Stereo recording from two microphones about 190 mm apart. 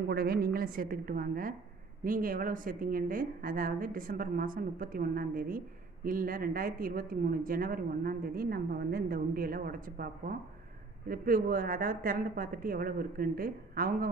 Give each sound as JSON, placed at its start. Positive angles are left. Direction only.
{"t": 0.1, "sound": "a woman's voice", "side_deg": -55}